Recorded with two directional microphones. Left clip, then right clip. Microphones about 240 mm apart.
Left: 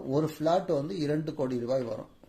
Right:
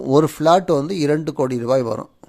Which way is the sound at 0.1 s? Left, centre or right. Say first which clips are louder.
Right 13 dB; right.